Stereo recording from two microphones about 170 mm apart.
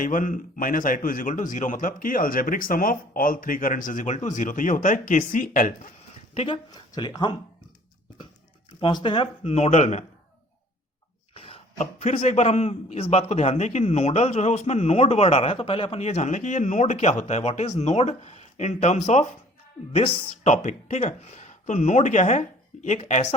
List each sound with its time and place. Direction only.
0.0 s a man's voice: 50° left (ahead or behind)
6.3 s speech: 35° left (ahead or behind)
6.7 s speech: 25° left (ahead or behind)
8.8 s a man's voice: 25° left (ahead or behind)
11.3 s a man's voice: 35° left (ahead or behind)